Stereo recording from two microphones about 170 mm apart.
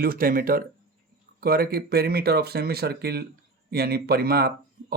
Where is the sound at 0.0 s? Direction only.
55° right (ahead or behind).